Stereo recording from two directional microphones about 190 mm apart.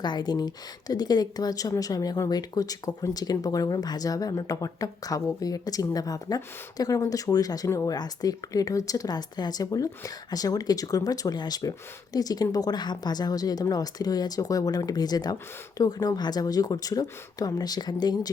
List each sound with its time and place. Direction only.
0.0 s speech: 25° left (ahead or behind)